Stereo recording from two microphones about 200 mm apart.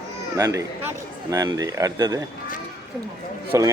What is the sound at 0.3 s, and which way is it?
A man's voice, 15° right (ahead or behind).